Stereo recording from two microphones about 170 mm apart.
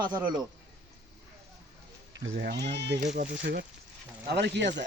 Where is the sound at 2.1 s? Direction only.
80° right.